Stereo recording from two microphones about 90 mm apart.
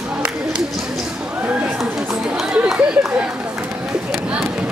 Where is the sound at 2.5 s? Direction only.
10° right (ahead or behind).